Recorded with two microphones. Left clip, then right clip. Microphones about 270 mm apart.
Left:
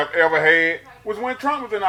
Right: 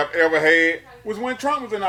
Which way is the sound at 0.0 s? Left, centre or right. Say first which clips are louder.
Left 1 dB; right.